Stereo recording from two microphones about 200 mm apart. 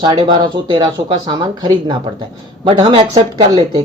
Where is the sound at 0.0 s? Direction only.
20° right (ahead or behind).